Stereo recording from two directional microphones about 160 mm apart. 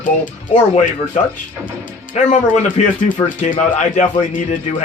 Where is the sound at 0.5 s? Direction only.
50° left (ahead or behind).